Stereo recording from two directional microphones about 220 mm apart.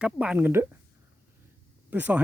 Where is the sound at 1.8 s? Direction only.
5° right (ahead or behind).